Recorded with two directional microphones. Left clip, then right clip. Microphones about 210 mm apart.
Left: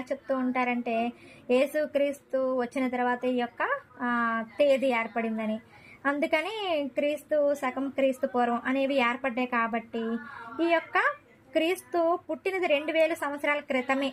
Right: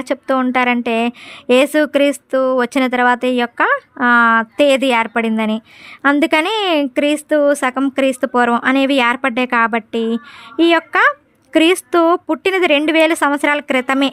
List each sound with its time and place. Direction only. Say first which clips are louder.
0.0 s a woman's voice: right 13 dB; 45° right (ahead or behind)